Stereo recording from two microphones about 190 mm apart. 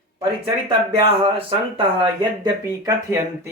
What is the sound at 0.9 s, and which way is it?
Speech, 25° right (ahead or behind).